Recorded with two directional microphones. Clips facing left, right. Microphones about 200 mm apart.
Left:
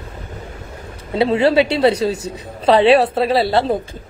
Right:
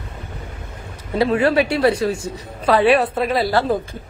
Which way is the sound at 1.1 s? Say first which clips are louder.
Left 2 dB; 25° left (ahead or behind).